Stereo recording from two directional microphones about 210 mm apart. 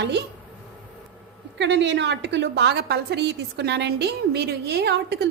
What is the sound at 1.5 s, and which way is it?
A woman's voice, 55° right (ahead or behind).